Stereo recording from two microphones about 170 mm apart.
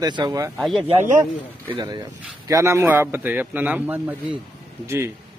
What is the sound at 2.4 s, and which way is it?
Speech, 15° right (ahead or behind).